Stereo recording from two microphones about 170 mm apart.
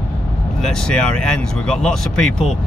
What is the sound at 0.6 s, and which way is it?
Speech, 5° left (ahead or behind).